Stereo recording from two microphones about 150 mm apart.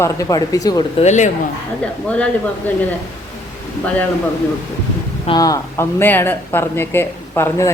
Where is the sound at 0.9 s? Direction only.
50° left (ahead or behind).